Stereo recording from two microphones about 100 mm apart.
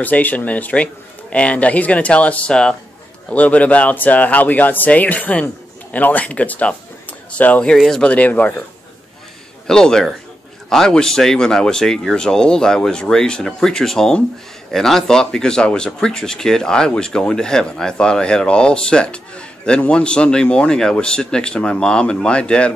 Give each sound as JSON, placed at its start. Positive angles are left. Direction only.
{"t": 0.0, "sound": "a man's voice", "side_deg": 15}
{"t": 9.7, "sound": "speech", "side_deg": 5}